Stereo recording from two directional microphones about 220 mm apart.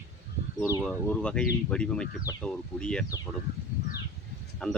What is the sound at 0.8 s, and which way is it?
Speech, 5° left (ahead or behind).